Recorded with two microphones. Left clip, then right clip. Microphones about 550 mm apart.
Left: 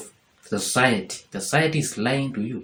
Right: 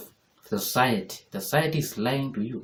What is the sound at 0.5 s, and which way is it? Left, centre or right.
Speech, right.